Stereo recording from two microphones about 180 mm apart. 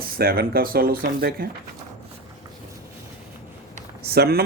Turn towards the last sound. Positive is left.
turn(degrees=-60)  # may be behind; listen again after turning